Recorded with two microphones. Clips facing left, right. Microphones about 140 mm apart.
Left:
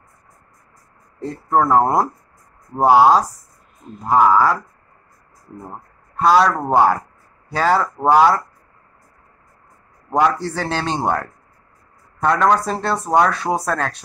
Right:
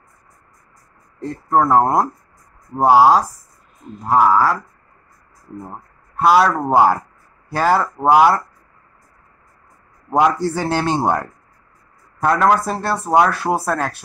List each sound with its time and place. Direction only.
1.2 s speech: centre (ahead or behind)
5.6 s speech: 5° right (ahead or behind)
10.0 s speech: 15° right (ahead or behind)